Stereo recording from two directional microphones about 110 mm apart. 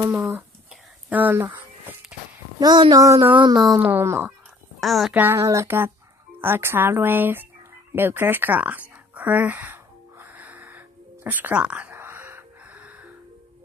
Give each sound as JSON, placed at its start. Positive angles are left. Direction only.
{"t": 0.0, "sound": "speech", "side_deg": -20}
{"t": 2.6, "sound": "speech", "side_deg": -40}
{"t": 3.8, "sound": "speech", "side_deg": -20}
{"t": 4.7, "sound": "speech", "side_deg": 0}
{"t": 5.1, "sound": "speech", "side_deg": -20}
{"t": 7.9, "sound": "a sound", "side_deg": -20}
{"t": 11.2, "sound": "gasp", "side_deg": -15}